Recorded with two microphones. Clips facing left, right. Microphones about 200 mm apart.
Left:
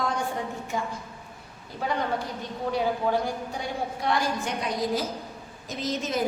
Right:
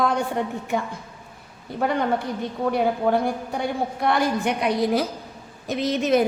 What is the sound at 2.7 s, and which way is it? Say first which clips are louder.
A woman's voice: right 4 dB; 60° right (ahead or behind).